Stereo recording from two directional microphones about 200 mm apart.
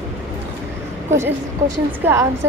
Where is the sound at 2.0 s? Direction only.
10° right (ahead or behind).